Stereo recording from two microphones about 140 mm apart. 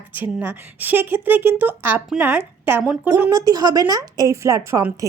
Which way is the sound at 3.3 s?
25° right (ahead or behind).